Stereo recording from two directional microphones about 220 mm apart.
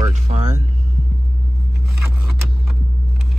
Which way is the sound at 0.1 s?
30° right (ahead or behind).